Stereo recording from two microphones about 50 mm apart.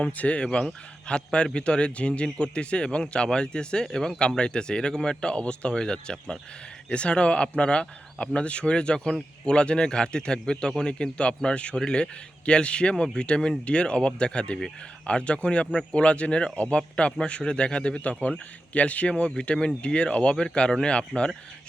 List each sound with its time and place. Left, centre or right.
0.0 s a man's voice: left